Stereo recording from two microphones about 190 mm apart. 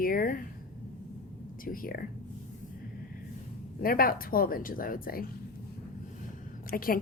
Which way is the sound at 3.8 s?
50° left (ahead or behind).